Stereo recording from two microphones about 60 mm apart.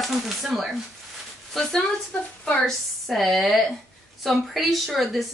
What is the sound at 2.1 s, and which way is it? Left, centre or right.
Speech, centre.